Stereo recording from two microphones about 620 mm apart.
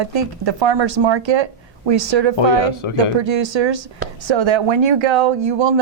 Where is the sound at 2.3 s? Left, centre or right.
Left.